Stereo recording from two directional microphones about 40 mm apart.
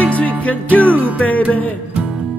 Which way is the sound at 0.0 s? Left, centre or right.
Left.